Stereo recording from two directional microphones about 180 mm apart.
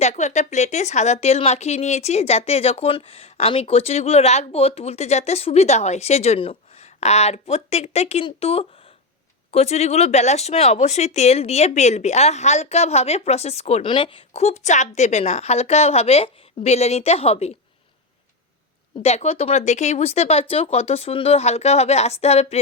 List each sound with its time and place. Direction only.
0.0 s speech: 40° left (ahead or behind)
19.0 s speech: 35° left (ahead or behind)